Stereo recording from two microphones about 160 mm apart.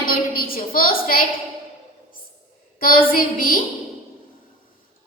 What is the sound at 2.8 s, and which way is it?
Speech, 65° left (ahead or behind).